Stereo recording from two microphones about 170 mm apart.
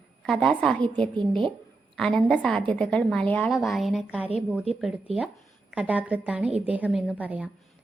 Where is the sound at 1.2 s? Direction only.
30° right (ahead or behind).